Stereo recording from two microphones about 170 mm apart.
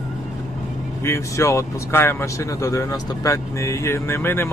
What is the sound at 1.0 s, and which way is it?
Speech, 15° left (ahead or behind).